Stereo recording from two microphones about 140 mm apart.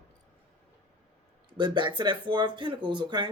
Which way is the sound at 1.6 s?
35° right (ahead or behind).